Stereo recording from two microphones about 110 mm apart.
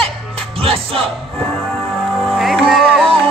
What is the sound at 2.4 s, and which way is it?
Music, centre (ahead or behind).